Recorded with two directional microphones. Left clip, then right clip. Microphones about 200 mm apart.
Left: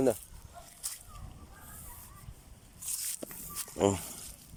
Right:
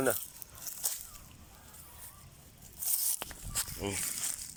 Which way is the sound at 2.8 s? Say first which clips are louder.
Right 2 dB; 40° right (ahead or behind).